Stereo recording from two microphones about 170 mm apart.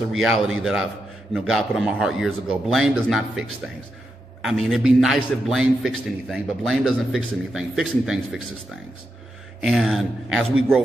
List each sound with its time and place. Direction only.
0.1 s a man's voice: 5° right (ahead or behind)
9.6 s a man's voice: centre (ahead or behind)